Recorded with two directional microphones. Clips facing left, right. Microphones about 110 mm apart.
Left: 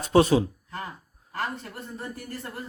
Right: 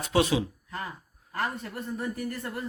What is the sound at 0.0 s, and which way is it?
Speech, 40° left (ahead or behind).